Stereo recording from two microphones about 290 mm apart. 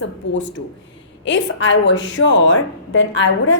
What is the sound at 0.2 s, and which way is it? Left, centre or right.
A woman's voice, left.